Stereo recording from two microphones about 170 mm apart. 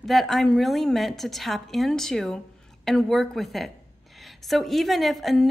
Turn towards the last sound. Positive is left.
turn(degrees=0)  # may be behind; listen again after turning